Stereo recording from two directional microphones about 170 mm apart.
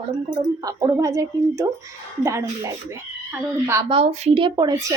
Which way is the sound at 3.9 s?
35° right (ahead or behind).